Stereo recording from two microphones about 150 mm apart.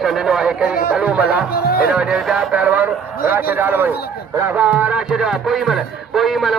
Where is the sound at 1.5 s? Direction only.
90° left.